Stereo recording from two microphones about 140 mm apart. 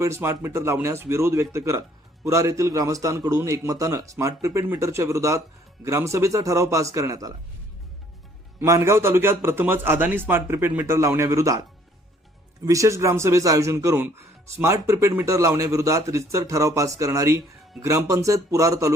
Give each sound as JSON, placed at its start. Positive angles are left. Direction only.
{"t": 0.0, "sound": "speech", "side_deg": -20}
{"t": 8.5, "sound": "a man's voice", "side_deg": -20}
{"t": 12.6, "sound": "speech", "side_deg": -25}